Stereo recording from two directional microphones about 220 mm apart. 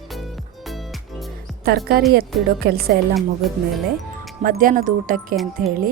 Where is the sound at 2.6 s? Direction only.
45° right (ahead or behind).